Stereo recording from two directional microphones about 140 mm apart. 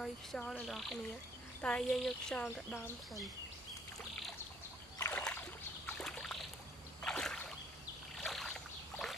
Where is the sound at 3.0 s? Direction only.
Centre (ahead or behind).